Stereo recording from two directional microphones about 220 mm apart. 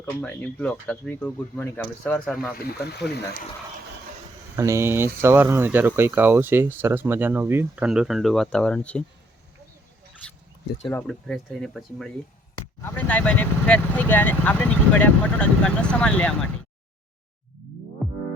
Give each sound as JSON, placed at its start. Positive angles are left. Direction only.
{"t": 0.0, "sound": "speech", "side_deg": 5}
{"t": 2.6, "sound": "speech", "side_deg": 45}
{"t": 4.5, "sound": "speech", "side_deg": -15}
{"t": 10.8, "sound": "speech", "side_deg": 0}
{"t": 18.0, "sound": "music", "side_deg": 0}